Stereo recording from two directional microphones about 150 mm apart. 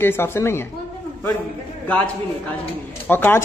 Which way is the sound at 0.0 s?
15° left (ahead or behind).